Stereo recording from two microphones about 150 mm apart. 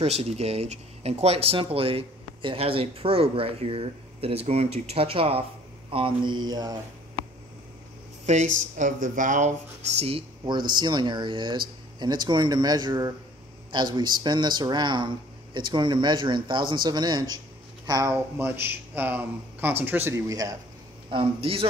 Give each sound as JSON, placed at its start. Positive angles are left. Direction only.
{"t": 0.0, "sound": "speech", "side_deg": -45}
{"t": 8.3, "sound": "speech", "side_deg": -50}
{"t": 9.9, "sound": "speech", "side_deg": -40}
{"t": 10.8, "sound": "speech", "side_deg": -30}
{"t": 21.1, "sound": "speech", "side_deg": -35}